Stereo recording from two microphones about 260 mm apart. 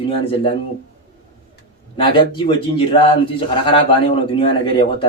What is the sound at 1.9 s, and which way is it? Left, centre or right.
Speech, centre.